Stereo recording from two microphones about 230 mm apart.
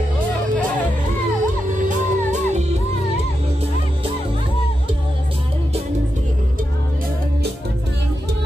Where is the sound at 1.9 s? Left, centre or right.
Right.